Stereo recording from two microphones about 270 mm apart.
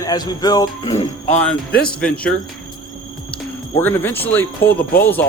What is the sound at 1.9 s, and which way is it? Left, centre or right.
Speech, centre.